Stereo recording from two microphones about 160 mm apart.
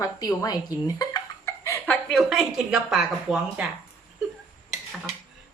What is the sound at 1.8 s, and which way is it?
Speech, 5° left (ahead or behind).